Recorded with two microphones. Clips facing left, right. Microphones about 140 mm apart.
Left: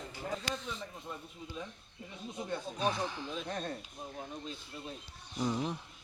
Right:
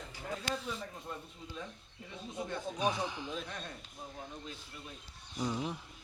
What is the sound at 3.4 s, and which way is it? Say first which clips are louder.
Speech: left 6 dB; 35° left (ahead or behind).